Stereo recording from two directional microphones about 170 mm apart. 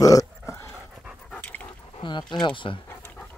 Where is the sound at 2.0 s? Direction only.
25° left (ahead or behind).